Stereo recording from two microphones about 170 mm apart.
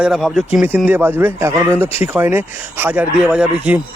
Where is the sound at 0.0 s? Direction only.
Centre (ahead or behind).